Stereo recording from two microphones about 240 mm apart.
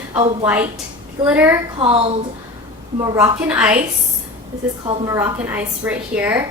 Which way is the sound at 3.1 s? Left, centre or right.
Centre.